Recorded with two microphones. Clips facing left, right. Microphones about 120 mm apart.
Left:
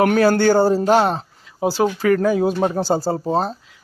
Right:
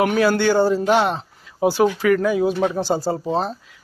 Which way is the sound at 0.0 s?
40° left (ahead or behind).